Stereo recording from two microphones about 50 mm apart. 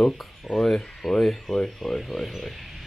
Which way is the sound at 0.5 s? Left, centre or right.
Centre.